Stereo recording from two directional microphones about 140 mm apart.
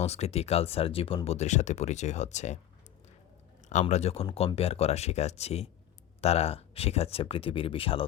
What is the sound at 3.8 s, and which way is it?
Speech, 50° left (ahead or behind).